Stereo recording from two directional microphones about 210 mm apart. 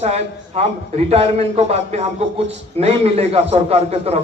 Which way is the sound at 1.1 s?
30° right (ahead or behind).